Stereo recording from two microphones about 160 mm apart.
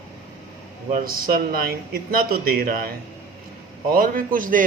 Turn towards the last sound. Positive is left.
turn(degrees=-60)  # may be behind; listen again after turning